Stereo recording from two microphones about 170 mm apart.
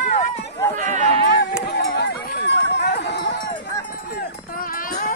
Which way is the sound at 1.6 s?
80° left.